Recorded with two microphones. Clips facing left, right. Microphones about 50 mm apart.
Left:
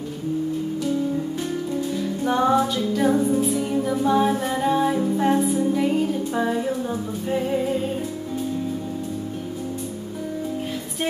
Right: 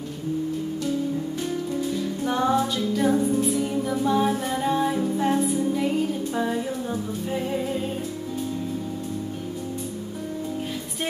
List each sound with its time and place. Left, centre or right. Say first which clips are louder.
1.8 s music: left 1 dB; centre